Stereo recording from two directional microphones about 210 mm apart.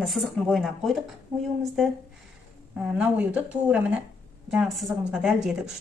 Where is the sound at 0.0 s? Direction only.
Centre (ahead or behind).